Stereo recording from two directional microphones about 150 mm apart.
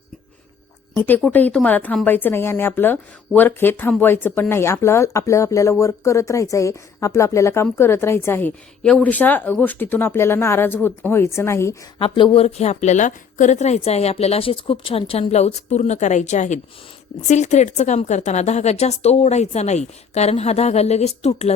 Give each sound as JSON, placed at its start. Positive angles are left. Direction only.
{"t": 0.9, "sound": "speech", "side_deg": 10}
{"t": 11.9, "sound": "a woman's voice", "side_deg": 35}